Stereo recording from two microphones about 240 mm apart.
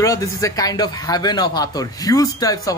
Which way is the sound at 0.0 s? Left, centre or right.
Centre.